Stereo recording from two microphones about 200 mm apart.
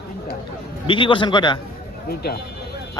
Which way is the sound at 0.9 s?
25° left (ahead or behind).